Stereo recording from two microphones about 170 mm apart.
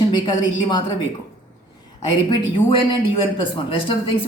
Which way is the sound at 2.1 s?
30° left (ahead or behind).